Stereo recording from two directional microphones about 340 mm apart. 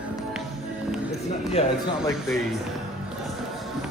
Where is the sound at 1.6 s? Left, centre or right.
Centre.